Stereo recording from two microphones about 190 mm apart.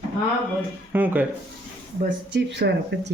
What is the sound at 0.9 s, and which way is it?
Speech, 10° right (ahead or behind).